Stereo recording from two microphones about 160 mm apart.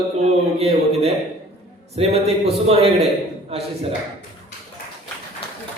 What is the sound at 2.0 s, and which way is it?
A man's voice, 40° right (ahead or behind).